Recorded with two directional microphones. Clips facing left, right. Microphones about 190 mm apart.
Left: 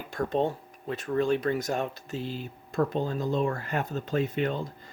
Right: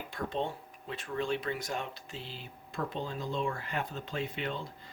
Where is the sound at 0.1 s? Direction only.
45° left (ahead or behind).